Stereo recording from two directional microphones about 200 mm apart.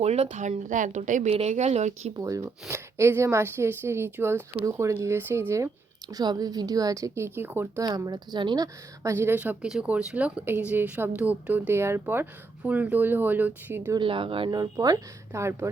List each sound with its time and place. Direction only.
0.0 s a woman's voice: 30° right (ahead or behind)
2.1 s speech: 15° right (ahead or behind)
14.0 s a woman's voice: 25° right (ahead or behind)